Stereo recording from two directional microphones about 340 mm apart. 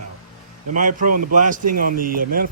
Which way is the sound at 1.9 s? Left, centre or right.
Right.